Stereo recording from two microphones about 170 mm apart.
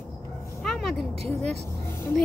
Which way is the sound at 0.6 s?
Centre (ahead or behind).